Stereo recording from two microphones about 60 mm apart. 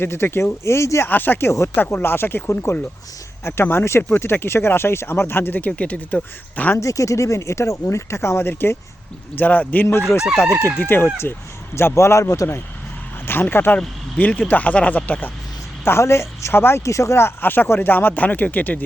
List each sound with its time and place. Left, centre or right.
0.0 s speech: left
1.0 s speech: left
6.7 s speech: left
9.4 s speech: left
13.2 s speech: left
15.8 s speech: left
16.8 s speech: left